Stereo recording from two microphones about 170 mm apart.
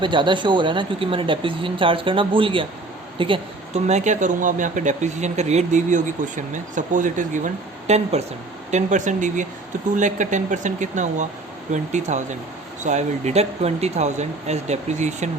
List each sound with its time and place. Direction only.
0.0 s speech: 30° right (ahead or behind); by 15.3 s 45° right (ahead or behind)